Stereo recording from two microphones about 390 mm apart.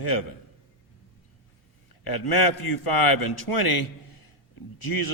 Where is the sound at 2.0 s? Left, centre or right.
Left.